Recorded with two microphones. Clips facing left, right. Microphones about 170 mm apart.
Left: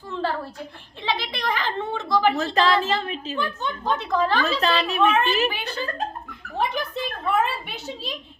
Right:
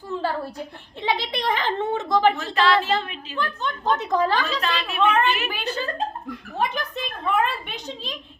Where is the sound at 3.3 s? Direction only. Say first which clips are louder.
Right 2 dB; 10° left (ahead or behind).